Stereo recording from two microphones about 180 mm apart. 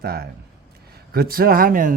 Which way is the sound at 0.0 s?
60° right (ahead or behind).